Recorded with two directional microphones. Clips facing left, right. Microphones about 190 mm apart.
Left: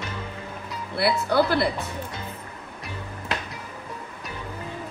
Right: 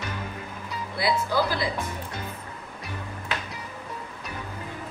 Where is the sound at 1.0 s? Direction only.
65° left (ahead or behind).